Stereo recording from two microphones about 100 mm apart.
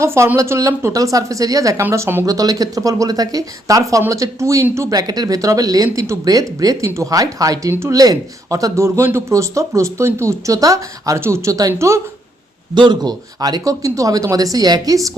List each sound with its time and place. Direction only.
0.0 s speech: 25° right (ahead or behind)
2.2 s speech: 35° right (ahead or behind)
4.9 s speech: 40° right (ahead or behind)
12.7 s speech: 50° right (ahead or behind)